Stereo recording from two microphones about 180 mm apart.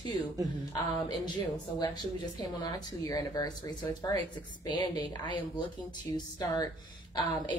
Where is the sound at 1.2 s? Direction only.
25° left (ahead or behind).